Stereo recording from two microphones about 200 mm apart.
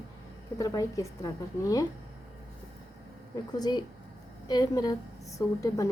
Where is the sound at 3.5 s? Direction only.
20° left (ahead or behind).